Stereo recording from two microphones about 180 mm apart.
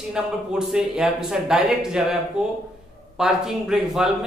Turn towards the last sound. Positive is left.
turn(degrees=-5)  # may be behind; listen again after turning